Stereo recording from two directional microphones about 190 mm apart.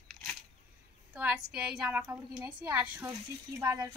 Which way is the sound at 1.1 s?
10° right (ahead or behind).